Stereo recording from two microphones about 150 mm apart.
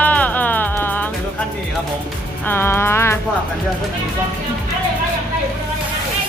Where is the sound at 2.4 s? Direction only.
15° left (ahead or behind).